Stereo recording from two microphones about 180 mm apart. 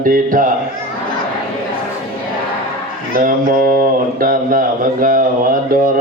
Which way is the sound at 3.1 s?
50° right (ahead or behind).